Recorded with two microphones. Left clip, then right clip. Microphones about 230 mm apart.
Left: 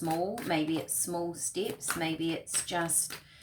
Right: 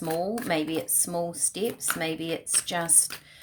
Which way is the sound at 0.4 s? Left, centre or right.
Right.